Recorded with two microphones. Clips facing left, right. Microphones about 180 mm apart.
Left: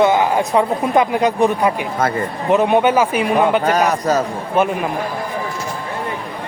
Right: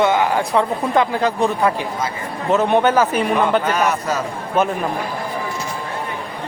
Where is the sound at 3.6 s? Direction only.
40° left (ahead or behind).